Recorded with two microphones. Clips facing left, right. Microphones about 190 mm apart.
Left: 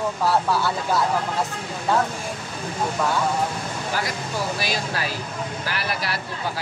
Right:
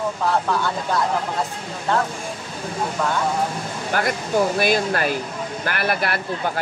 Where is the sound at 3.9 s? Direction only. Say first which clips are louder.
Right 7 dB; 55° right (ahead or behind).